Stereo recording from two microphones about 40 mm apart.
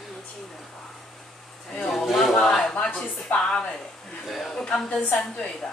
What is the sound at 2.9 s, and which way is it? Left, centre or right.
Speech, left.